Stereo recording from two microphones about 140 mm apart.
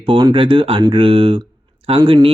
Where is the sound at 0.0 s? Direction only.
35° right (ahead or behind).